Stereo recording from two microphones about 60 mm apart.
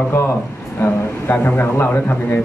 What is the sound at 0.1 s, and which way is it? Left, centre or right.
A man's voice, left.